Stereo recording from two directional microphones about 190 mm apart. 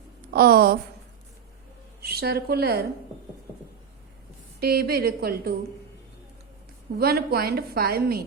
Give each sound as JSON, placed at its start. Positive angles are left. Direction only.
{"t": 0.3, "sound": "a woman's voice", "side_deg": -50}
{"t": 2.0, "sound": "a woman's voice", "side_deg": -55}
{"t": 4.6, "sound": "a woman's voice", "side_deg": -55}
{"t": 7.0, "sound": "a woman's voice", "side_deg": -55}